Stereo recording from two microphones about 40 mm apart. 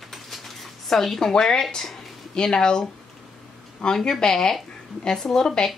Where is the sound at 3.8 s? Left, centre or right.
Centre.